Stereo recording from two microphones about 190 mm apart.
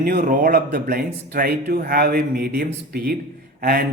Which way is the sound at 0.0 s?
50° right (ahead or behind).